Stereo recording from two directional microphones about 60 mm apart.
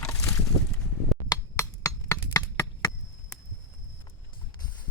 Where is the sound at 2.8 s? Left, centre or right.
Left.